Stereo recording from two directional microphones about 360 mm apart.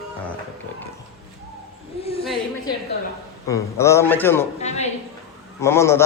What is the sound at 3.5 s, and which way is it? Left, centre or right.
Speech, centre.